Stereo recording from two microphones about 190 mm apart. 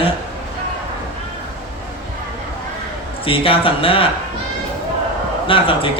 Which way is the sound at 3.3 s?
30° left (ahead or behind).